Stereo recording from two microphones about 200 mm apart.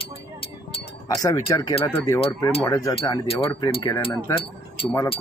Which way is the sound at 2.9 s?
25° left (ahead or behind).